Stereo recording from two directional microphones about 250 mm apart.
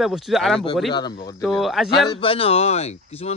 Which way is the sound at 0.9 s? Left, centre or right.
Centre.